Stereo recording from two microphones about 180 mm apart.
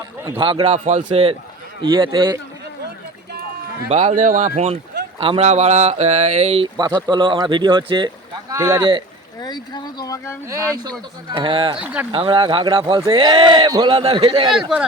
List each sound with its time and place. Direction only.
0.3 s speech: 30° right (ahead or behind)
3.8 s speech: 40° right (ahead or behind)
6.7 s speech: 25° right (ahead or behind)
9.4 s speech: 25° left (ahead or behind)
11.3 s speech: 25° right (ahead or behind)
11.8 s speech: 5° right (ahead or behind)
12.1 s speech: 30° right (ahead or behind)